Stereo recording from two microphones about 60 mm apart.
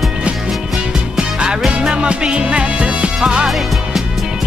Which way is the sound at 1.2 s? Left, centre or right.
Centre.